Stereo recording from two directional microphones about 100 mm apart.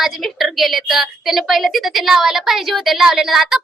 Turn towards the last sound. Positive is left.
turn(degrees=0)  # may be behind; listen again after turning